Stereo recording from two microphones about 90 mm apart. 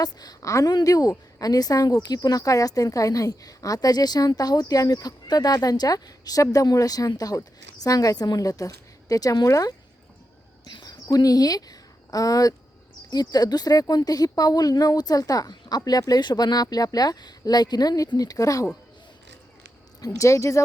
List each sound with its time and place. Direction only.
0.0 s a woman's voice: 45° left (ahead or behind)
10.7 s speech: 60° left (ahead or behind)
11.1 s a woman's voice: 45° left (ahead or behind)
20.1 s speech: 35° left (ahead or behind)